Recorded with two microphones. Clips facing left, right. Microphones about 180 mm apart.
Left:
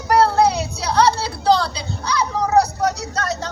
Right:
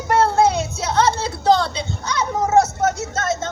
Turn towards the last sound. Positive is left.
turn(degrees=-25)  # may be behind; listen again after turning